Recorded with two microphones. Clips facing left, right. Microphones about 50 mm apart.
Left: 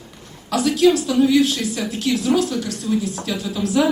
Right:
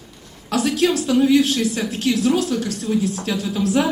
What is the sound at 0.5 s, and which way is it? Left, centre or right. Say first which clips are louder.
Speech: left 1 dB; right.